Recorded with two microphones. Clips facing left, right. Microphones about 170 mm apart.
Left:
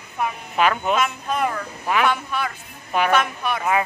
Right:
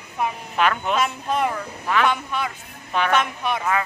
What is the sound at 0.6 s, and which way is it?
Speech, 5° left (ahead or behind).